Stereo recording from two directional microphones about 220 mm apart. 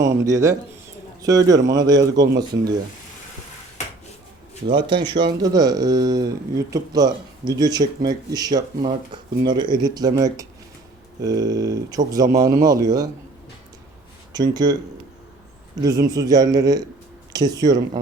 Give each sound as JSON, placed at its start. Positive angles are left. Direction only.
{"t": 0.3, "sound": "speech", "side_deg": -15}
{"t": 4.7, "sound": "speech", "side_deg": -20}
{"t": 14.3, "sound": "speech", "side_deg": -20}
{"t": 15.8, "sound": "speech", "side_deg": -15}